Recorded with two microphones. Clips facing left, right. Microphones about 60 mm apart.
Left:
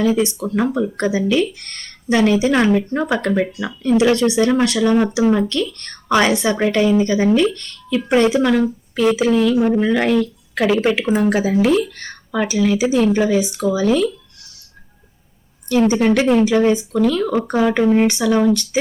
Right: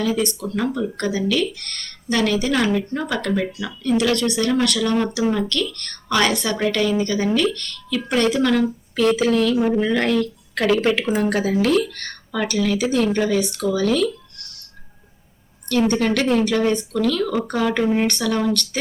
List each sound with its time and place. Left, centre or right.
0.0 s speech: centre
15.9 s speech: centre